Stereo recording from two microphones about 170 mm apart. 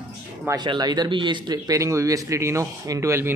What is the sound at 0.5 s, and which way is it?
A man's voice, 25° right (ahead or behind).